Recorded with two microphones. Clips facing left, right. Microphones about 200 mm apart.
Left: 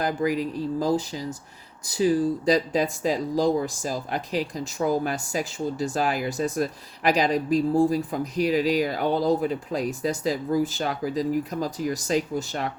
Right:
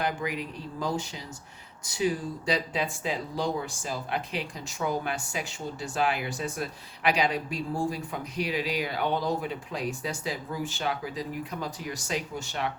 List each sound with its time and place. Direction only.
0.0 s speech: 40° left (ahead or behind)